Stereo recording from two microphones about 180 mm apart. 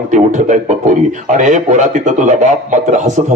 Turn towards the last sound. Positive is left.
turn(degrees=-40)  # may be behind; listen again after turning